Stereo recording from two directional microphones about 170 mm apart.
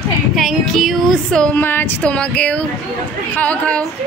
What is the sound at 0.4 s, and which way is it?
A woman's voice, centre (ahead or behind).